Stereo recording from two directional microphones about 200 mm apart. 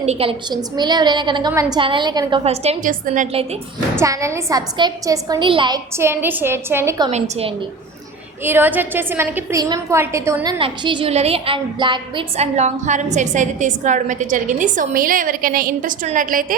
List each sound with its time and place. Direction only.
0.0 s a woman's voice: 30° right (ahead or behind)
3.9 s a woman's voice: 15° right (ahead or behind)
7.1 s a woman's voice: 30° right (ahead or behind)
8.4 s a woman's voice: 10° right (ahead or behind)
10.6 s a woman's voice: 25° right (ahead or behind); by 16.6 s 45° right (ahead or behind)